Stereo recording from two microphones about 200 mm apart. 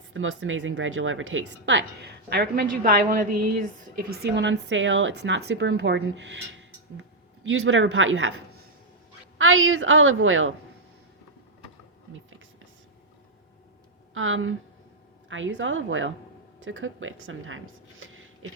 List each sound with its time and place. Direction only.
0.1 s speech: 75° right (ahead or behind)
9.4 s a woman's voice: 85° right
14.1 s a woman's voice: 85° right
15.3 s a woman's voice: 75° right (ahead or behind)
18.4 s a sound: 90° right